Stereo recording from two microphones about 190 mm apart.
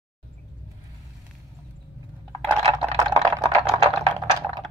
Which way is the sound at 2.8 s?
20° right (ahead or behind).